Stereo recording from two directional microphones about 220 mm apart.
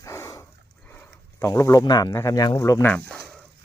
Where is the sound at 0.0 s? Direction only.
15° left (ahead or behind).